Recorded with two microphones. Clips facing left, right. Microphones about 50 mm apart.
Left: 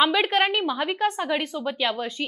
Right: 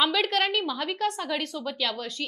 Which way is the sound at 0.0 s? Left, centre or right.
Left.